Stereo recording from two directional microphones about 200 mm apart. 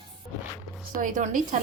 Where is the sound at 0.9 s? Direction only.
40° right (ahead or behind).